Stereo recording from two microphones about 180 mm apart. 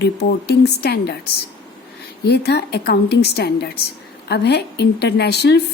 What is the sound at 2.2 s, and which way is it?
A woman's voice, 65° left (ahead or behind).